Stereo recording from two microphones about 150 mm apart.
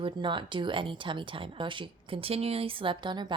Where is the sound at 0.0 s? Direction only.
30° right (ahead or behind).